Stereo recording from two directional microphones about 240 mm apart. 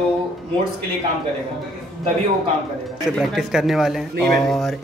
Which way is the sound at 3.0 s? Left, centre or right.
Centre.